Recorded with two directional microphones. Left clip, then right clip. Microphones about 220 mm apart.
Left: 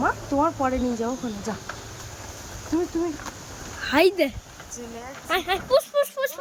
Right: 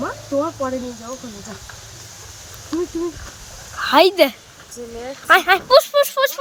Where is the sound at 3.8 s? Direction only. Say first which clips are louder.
Right 6 dB; centre (ahead or behind).